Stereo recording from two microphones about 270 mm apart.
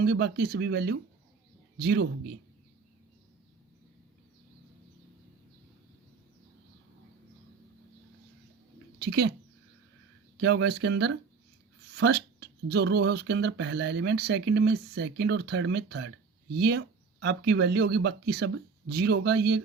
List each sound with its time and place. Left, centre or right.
0.0 s speech: right
9.0 s speech: right
10.3 s speech: right